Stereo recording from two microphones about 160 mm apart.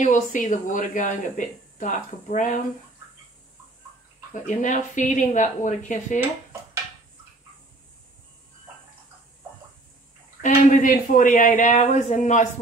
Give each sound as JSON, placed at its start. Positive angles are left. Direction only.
{"t": 0.0, "sound": "a woman's voice", "side_deg": 55}
{"t": 4.3, "sound": "a woman's voice", "side_deg": 50}
{"t": 10.4, "sound": "a woman's voice", "side_deg": 55}